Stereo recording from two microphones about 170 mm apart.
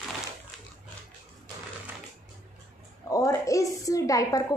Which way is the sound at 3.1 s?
20° left (ahead or behind).